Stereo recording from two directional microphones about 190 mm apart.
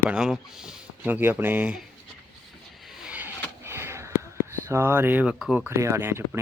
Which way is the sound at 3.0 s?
5° right (ahead or behind).